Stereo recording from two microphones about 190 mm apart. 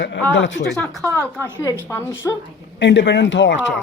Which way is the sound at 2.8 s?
70° left (ahead or behind).